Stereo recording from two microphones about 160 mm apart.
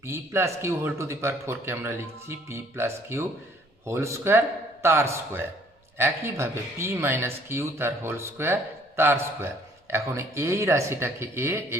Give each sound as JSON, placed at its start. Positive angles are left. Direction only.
{"t": 0.0, "sound": "speech", "side_deg": -15}